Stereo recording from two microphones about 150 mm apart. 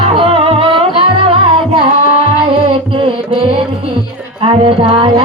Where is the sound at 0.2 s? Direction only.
40° right (ahead or behind).